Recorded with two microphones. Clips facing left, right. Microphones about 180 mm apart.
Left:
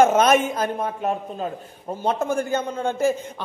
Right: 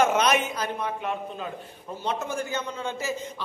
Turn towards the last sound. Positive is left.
turn(degrees=50)  # may be behind; listen again after turning